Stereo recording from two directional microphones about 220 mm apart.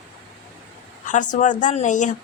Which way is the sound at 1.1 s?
35° left (ahead or behind).